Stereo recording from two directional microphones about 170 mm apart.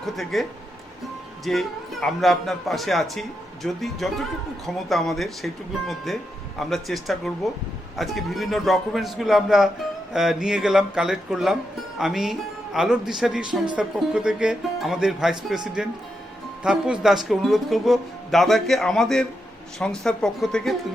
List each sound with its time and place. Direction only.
0.0 s a man's voice: centre (ahead or behind)
1.5 s a man's voice: centre (ahead or behind)